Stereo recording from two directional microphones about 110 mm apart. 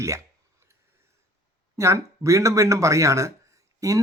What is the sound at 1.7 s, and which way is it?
Speech, 25° right (ahead or behind).